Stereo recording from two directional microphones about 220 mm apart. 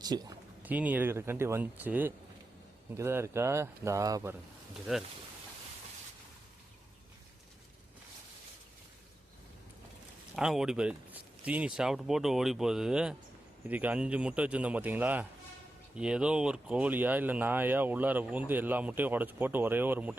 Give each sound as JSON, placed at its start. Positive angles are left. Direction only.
{"t": 0.0, "sound": "speech", "side_deg": -15}
{"t": 4.9, "sound": "speech", "side_deg": -5}
{"t": 10.3, "sound": "speech", "side_deg": 0}